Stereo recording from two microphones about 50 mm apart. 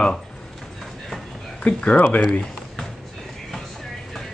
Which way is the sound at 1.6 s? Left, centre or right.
Left.